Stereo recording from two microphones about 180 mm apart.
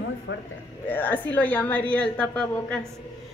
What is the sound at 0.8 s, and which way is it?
A woman's voice, 10° left (ahead or behind).